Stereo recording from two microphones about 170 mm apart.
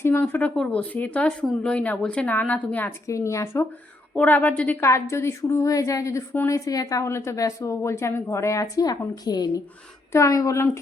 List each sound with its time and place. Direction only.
0.0 s a woman's voice: 15° left (ahead or behind)